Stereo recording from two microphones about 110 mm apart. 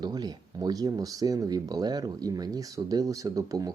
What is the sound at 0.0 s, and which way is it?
Speech, 40° right (ahead or behind).